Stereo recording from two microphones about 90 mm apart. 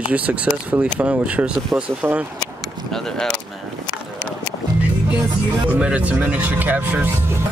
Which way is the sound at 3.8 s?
15° left (ahead or behind).